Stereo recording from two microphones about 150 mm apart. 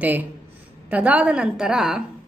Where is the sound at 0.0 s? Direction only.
10° right (ahead or behind).